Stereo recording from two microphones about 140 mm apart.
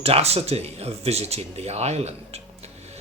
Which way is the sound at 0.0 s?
45° right (ahead or behind).